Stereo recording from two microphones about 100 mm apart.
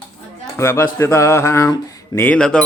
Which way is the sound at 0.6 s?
25° left (ahead or behind).